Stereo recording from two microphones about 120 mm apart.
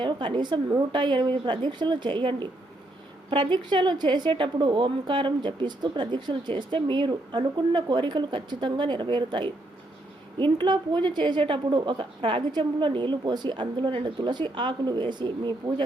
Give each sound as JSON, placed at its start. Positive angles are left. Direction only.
{"t": 0.0, "sound": "a woman's voice", "side_deg": -40}